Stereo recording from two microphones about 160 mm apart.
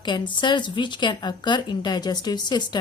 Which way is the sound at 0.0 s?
30° left (ahead or behind).